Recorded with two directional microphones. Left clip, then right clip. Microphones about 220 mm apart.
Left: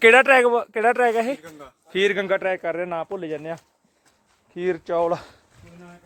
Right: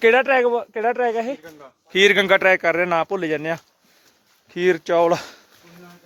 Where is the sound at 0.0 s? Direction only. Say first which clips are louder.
Left 2 dB; 5° left (ahead or behind).